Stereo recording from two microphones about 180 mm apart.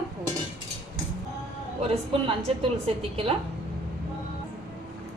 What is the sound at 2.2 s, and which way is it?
A woman's voice, 30° right (ahead or behind).